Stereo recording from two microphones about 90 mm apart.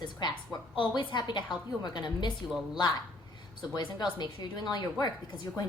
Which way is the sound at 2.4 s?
5° right (ahead or behind).